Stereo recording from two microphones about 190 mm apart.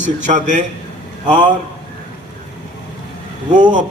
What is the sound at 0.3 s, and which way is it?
A man's voice, 40° right (ahead or behind).